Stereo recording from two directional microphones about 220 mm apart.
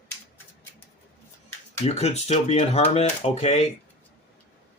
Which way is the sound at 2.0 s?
30° left (ahead or behind).